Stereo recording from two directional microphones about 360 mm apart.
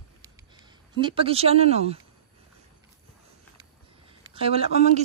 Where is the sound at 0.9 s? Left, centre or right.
Centre.